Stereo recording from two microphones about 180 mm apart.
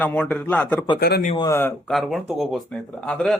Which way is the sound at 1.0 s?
60° left (ahead or behind).